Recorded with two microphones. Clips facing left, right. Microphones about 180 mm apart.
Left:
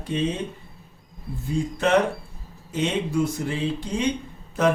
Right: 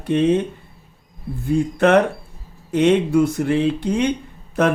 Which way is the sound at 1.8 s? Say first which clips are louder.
Right 5 dB; 60° right (ahead or behind).